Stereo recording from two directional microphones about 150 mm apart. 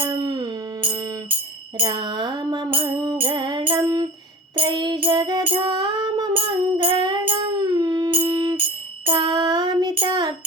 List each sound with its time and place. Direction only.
0.0 s music: 30° right (ahead or behind)
9.0 s child singing: 30° right (ahead or behind)